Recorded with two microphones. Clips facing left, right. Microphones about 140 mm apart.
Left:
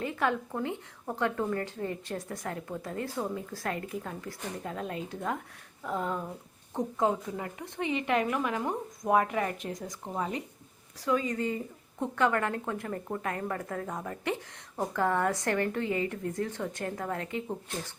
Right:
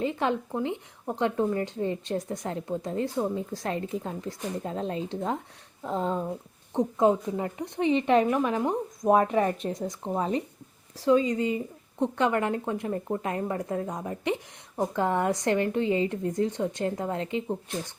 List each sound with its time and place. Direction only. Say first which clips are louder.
0.0 s speech: right 3 dB; 20° right (ahead or behind)